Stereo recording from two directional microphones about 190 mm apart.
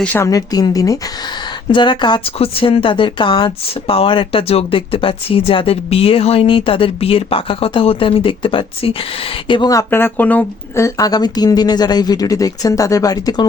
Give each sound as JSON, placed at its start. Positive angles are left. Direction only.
{"t": 0.0, "sound": "a woman's voice", "side_deg": 10}